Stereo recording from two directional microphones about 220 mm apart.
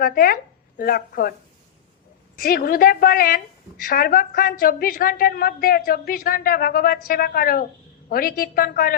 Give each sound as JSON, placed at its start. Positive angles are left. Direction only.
{"t": 0.0, "sound": "a woman's voice", "side_deg": 40}
{"t": 2.4, "sound": "a woman's voice", "side_deg": 40}